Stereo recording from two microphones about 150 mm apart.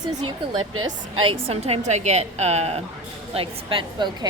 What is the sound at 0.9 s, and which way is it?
A woman's voice, 35° right (ahead or behind).